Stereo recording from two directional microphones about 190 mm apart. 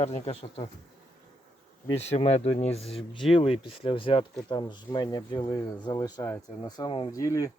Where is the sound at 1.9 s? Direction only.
35° left (ahead or behind).